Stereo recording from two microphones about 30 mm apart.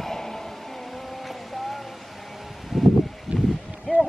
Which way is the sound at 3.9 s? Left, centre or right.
Left.